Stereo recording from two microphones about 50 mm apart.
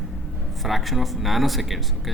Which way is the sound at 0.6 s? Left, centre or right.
Centre.